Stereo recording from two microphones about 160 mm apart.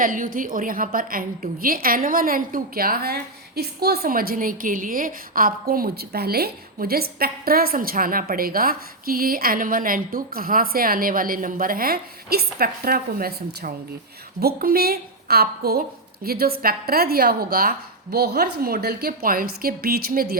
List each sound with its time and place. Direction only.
0.0 s a woman's voice: 60° right (ahead or behind)